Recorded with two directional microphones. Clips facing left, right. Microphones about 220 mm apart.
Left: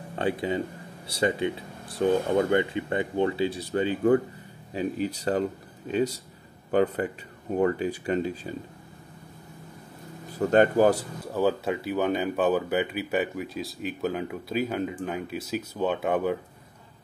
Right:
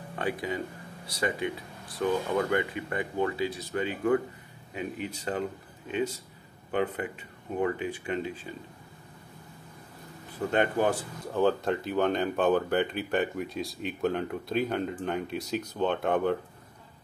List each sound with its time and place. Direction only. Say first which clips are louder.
0.1 s speech: left 5 dB; 25° left (ahead or behind)
10.5 s speech: left 6 dB; 40° left (ahead or behind)
11.3 s speech: even; 5° left (ahead or behind)